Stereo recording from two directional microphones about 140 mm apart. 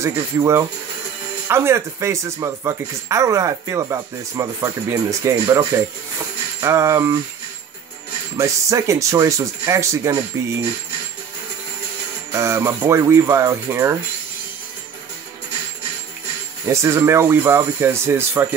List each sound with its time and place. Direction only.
0.0 s speech: 20° right (ahead or behind)
8.4 s speech: 20° right (ahead or behind)
12.3 s speech: 20° right (ahead or behind)
16.6 s speech: 20° right (ahead or behind)